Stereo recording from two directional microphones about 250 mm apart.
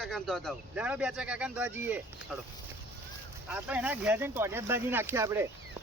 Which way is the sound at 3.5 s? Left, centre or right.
Centre.